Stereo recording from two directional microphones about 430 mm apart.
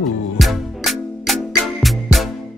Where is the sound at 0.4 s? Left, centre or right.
Centre.